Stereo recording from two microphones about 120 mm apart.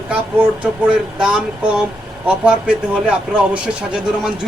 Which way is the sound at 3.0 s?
10° right (ahead or behind).